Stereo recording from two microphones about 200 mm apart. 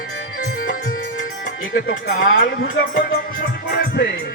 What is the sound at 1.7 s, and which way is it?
Speech, 45° left (ahead or behind).